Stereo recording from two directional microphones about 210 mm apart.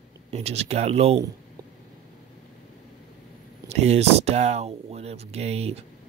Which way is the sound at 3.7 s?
30° right (ahead or behind).